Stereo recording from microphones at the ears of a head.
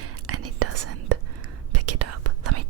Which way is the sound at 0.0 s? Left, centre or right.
Right.